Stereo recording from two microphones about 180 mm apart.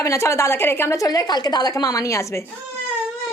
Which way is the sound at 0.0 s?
15° left (ahead or behind).